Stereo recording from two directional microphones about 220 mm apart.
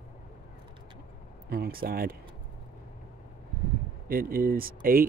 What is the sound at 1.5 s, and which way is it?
Speech, 45° right (ahead or behind).